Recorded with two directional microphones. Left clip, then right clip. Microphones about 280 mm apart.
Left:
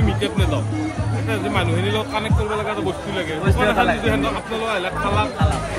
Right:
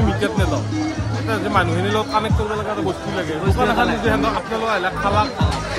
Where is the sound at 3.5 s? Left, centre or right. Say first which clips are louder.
Left 1 dB; centre.